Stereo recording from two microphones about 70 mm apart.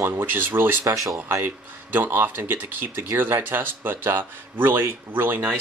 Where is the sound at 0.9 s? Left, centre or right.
Right.